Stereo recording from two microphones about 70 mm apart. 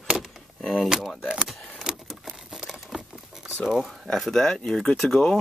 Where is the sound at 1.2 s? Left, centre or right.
Centre.